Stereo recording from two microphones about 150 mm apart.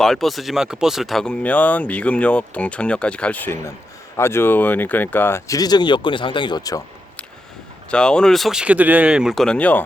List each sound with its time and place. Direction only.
0.0 s speech: centre (ahead or behind); by 6.8 s 25° left (ahead or behind)
7.9 s speech: 5° left (ahead or behind)